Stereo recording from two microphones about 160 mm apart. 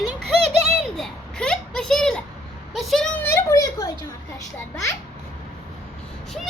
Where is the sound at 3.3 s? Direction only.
20° left (ahead or behind).